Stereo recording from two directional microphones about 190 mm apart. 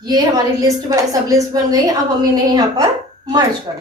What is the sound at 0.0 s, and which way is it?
A woman's voice, 20° right (ahead or behind).